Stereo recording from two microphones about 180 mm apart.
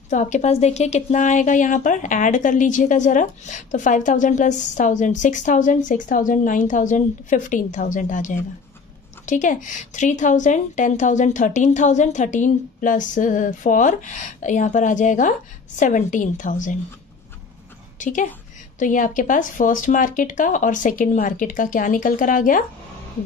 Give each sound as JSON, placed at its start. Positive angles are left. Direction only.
{"t": 0.1, "sound": "speech", "side_deg": 40}
{"t": 17.9, "sound": "a woman's voice", "side_deg": 45}